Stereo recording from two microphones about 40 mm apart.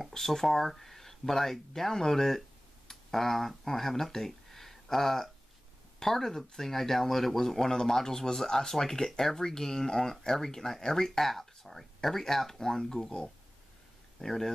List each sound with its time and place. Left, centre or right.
0.0 s speech: centre
14.2 s speech: centre